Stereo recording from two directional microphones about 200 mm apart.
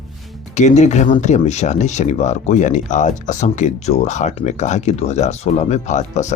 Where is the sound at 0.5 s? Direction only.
35° left (ahead or behind).